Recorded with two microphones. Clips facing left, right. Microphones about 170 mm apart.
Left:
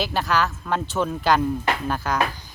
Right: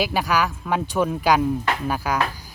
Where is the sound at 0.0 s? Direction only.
10° right (ahead or behind).